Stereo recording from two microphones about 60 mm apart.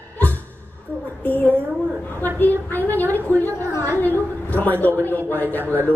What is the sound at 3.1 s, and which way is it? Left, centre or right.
Speech, right.